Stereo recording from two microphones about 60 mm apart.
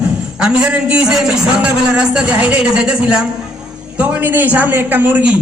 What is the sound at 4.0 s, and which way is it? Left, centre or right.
A man's voice, right.